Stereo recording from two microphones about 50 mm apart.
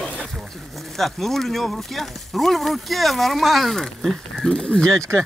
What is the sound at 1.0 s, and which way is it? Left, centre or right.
Speech, centre.